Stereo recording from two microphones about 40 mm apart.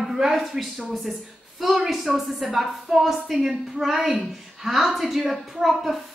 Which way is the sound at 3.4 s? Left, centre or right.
Centre.